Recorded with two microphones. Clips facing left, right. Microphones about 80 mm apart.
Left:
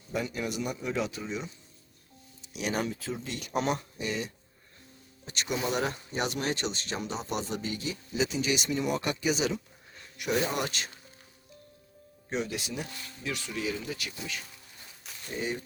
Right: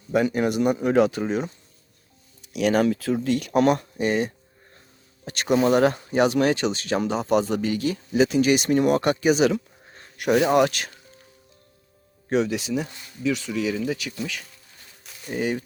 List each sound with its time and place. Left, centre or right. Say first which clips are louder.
0.1 s speech: right 11 dB; right
9.9 s a sound: right 6 dB; right
10.2 s speech: right 11 dB; right
12.3 s speech: right 10 dB; right
15.3 s speech: right 8 dB; right